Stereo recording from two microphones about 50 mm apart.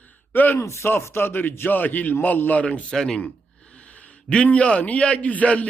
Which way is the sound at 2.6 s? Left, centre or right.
Left.